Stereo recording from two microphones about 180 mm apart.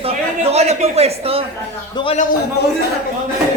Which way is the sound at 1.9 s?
25° left (ahead or behind).